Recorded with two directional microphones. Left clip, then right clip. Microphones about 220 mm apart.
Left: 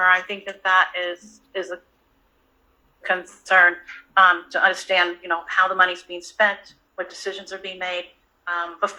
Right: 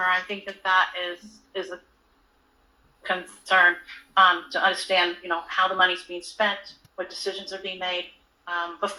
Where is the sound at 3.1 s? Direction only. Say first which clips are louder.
Left 4 dB; 30° left (ahead or behind).